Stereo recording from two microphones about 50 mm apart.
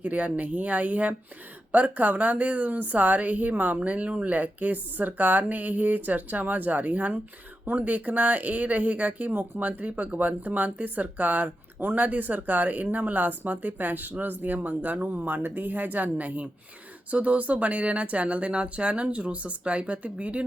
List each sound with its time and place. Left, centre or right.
0.0 s speech: right
15.1 s speech: right